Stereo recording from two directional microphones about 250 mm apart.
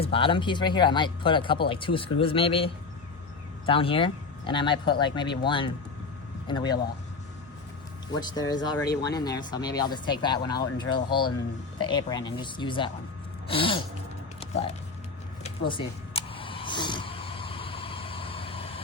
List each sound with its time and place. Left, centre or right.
0.0 s speech: left
3.7 s speech: left
8.4 s speech: centre
15.4 s a sound: centre